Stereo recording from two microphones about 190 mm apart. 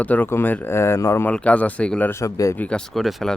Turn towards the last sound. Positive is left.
turn(degrees=0)  # may be behind; listen again after turning